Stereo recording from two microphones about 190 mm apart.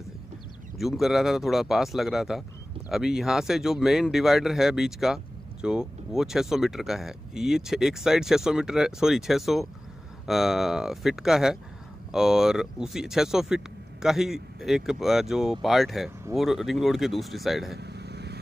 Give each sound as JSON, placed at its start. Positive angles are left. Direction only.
{"t": 0.7, "sound": "speech", "side_deg": 0}
{"t": 17.7, "sound": "vehicle", "side_deg": -60}